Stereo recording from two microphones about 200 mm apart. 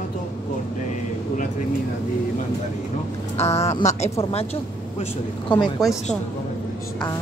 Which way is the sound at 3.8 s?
35° left (ahead or behind).